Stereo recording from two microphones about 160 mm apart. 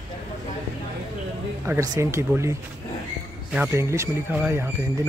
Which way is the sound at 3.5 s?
15° right (ahead or behind).